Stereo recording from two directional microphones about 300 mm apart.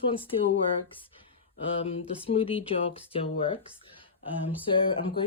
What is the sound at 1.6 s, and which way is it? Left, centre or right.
Speech, centre.